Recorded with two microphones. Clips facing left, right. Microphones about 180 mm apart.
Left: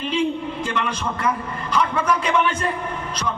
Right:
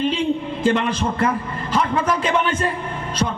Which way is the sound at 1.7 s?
30° right (ahead or behind).